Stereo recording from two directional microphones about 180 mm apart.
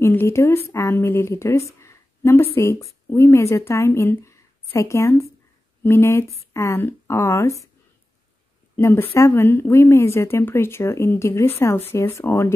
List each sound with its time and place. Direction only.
0.0 s a woman's voice: 15° left (ahead or behind)
8.7 s speech: 15° left (ahead or behind)